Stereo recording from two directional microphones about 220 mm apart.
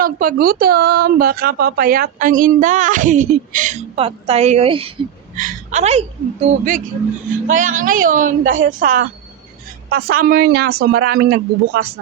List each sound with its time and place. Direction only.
0.0 s a woman's voice: 40° right (ahead or behind)